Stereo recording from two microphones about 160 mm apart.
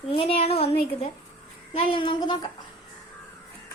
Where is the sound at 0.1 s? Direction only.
35° left (ahead or behind).